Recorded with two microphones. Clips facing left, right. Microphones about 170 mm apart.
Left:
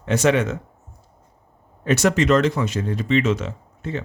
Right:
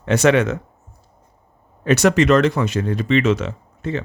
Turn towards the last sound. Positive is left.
turn(degrees=-85)